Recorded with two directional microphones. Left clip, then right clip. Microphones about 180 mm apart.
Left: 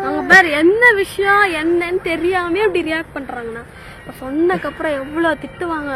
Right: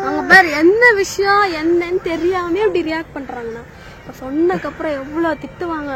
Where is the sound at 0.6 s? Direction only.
15° left (ahead or behind).